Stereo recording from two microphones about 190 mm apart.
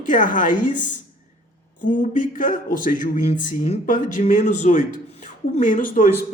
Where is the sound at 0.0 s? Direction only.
45° left (ahead or behind).